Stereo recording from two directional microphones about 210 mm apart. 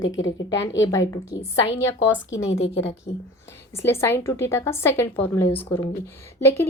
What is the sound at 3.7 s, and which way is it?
A woman's voice, 10° left (ahead or behind).